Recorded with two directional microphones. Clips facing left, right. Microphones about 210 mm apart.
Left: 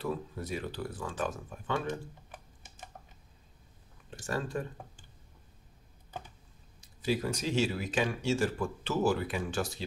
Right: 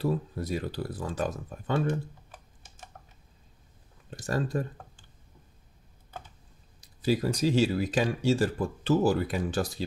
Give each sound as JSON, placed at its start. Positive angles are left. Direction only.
{"t": 0.0, "sound": "speech", "side_deg": -35}
{"t": 4.1, "sound": "speech", "side_deg": -40}
{"t": 6.8, "sound": "speech", "side_deg": -35}